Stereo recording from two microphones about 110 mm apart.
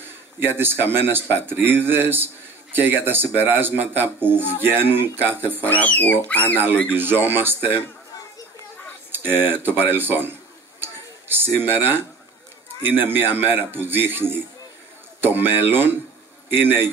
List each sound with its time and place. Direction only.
0.6 s speech: 20° right (ahead or behind)
5.7 s speech: 15° left (ahead or behind)
6.9 s speech: 20° right (ahead or behind)
9.1 s a sound: 20° right (ahead or behind)
9.5 s speech: 20° right (ahead or behind)
10.8 s a sound: 20° right (ahead or behind)
12.8 s speech: 20° right (ahead or behind)